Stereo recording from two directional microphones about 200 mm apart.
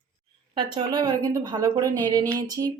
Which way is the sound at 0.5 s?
20° right (ahead or behind).